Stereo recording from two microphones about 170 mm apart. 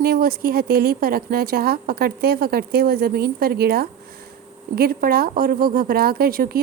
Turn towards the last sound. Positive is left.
turn(degrees=-60)  # may be behind; listen again after turning